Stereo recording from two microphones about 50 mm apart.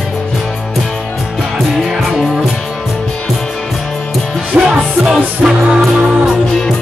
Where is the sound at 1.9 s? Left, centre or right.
Centre.